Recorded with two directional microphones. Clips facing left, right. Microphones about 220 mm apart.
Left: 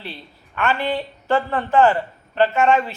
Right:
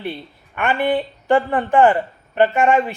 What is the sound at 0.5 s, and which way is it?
A woman's voice, 15° right (ahead or behind).